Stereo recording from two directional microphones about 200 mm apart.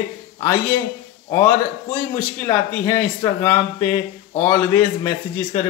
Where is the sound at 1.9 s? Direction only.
10° left (ahead or behind).